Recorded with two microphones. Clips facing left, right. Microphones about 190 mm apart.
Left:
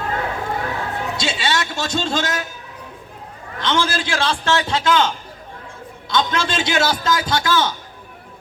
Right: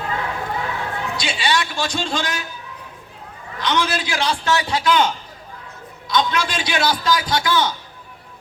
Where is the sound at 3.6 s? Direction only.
25° left (ahead or behind).